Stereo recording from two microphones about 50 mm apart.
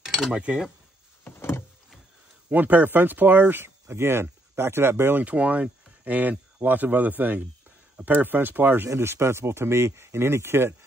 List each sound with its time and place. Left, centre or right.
0.0 s a sound: centre
0.3 s speech: right
2.5 s speech: right
5.2 s speech: right
8.8 s speech: right